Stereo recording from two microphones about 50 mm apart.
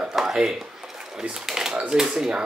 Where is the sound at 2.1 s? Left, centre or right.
Centre.